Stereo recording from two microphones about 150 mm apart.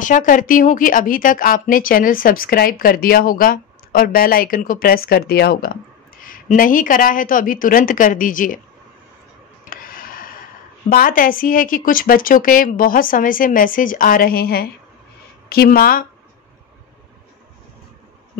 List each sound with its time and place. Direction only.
0.0 s a woman's voice: 60° left (ahead or behind); by 5.8 s 85° left
6.2 s a woman's voice: 65° left (ahead or behind)
9.7 s a sound: 70° left (ahead or behind)
10.9 s a woman's voice: 70° left (ahead or behind)